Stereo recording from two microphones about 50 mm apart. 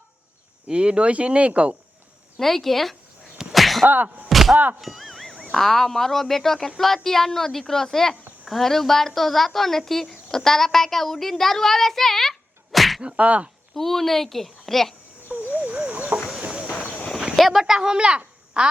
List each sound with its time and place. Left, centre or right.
0.7 s speech: right
2.4 s speech: centre
3.5 s sneeze: centre
3.8 s a sound: right
4.3 s a sound: centre
4.5 s speech: right
4.8 s a sound: centre
5.5 s speech: centre
13.0 s speech: right
13.7 s speech: centre
15.5 s a sound: right
16.7 s walk: left
17.3 s speech: centre
17.6 s speech: centre